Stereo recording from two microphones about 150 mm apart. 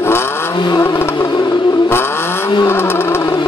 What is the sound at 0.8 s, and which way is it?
Vehicle, 15° left (ahead or behind).